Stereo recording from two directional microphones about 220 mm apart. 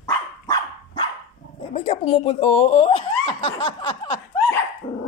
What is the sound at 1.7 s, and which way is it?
Chuckle, 30° left (ahead or behind).